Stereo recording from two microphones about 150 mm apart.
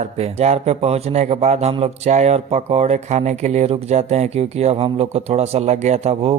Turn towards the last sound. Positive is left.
turn(degrees=-45)  # may be behind; listen again after turning